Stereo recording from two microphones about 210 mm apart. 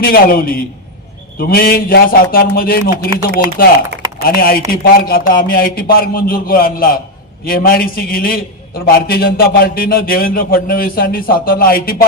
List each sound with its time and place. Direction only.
0.0 s a man's voice: 45° left (ahead or behind)